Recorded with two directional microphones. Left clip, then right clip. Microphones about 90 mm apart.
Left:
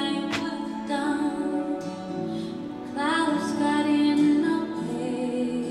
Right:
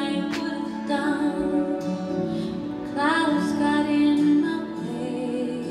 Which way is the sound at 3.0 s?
40° left (ahead or behind).